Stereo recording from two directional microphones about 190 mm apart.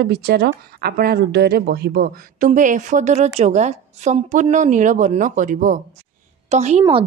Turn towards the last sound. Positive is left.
turn(degrees=-35)  # may be behind; listen again after turning